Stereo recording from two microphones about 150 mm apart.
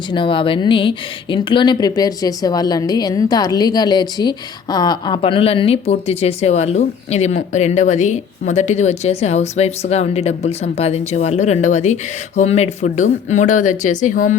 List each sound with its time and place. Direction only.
0.1 s speech: 35° left (ahead or behind); by 14.3 s 60° left (ahead or behind)